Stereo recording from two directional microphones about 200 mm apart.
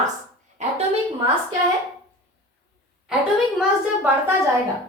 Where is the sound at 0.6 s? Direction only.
35° right (ahead or behind).